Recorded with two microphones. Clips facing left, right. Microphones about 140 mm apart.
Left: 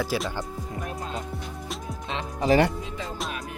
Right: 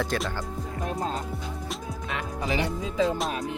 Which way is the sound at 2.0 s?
25° left (ahead or behind).